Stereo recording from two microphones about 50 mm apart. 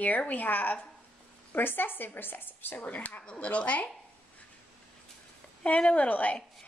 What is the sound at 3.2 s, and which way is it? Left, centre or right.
Speech, centre.